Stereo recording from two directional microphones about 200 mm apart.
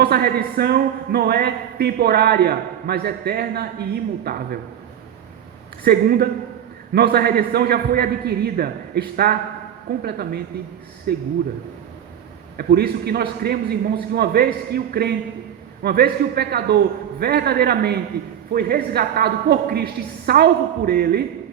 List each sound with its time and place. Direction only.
0.0 s a man's voice: 50° right (ahead or behind)
5.8 s a man's voice: 50° right (ahead or behind)
12.5 s a man's voice: 50° right (ahead or behind)